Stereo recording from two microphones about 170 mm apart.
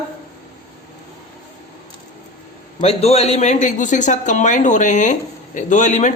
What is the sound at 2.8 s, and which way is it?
Speech, 40° left (ahead or behind).